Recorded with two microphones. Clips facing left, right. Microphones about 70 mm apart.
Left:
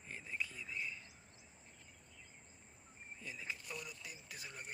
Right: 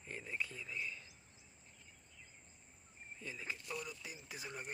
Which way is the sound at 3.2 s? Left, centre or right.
Centre.